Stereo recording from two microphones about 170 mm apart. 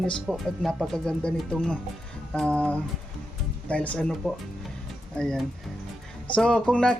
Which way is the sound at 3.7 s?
5° left (ahead or behind).